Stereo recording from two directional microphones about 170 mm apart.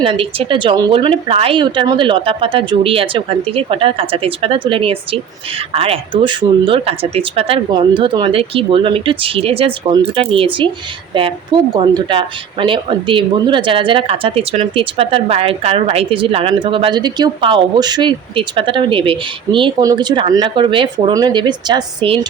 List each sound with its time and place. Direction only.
0.0 s a woman's voice: 30° right (ahead or behind)